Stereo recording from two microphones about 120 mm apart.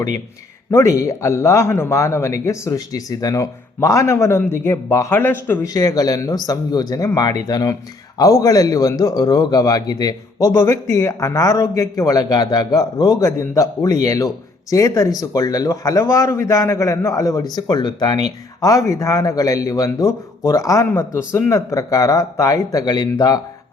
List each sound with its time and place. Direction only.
0.7 s speech: 25° left (ahead or behind)
5.6 s speech: 30° left (ahead or behind)